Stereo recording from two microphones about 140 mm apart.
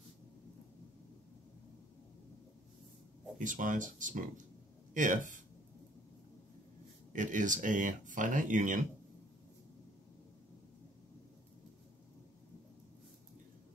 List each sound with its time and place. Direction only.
3.3 s speech: 70° right (ahead or behind)
7.1 s speech: 65° right (ahead or behind)